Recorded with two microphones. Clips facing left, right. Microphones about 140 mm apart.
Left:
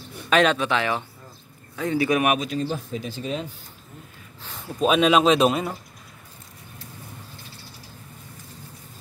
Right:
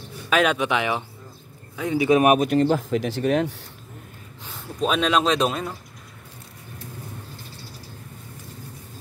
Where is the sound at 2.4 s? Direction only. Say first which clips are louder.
Right 8 dB; 65° right (ahead or behind).